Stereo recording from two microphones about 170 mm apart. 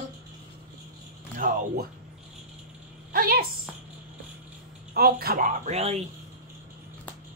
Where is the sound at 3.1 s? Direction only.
65° right (ahead or behind).